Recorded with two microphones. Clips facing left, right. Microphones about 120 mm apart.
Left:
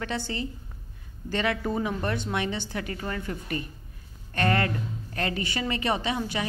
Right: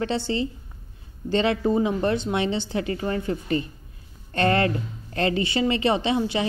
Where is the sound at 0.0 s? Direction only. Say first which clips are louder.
Right 6 dB; 25° right (ahead or behind).